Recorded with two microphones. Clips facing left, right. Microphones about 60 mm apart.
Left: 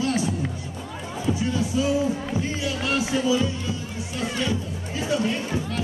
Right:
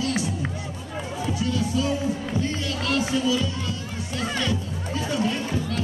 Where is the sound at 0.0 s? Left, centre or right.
Left.